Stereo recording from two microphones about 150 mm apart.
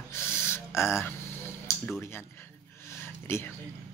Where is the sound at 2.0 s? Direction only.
15° left (ahead or behind).